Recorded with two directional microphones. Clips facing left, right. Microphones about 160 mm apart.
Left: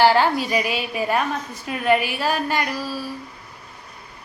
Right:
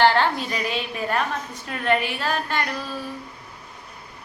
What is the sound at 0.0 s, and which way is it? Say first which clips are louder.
A woman's voice: left 2 dB; 10° left (ahead or behind).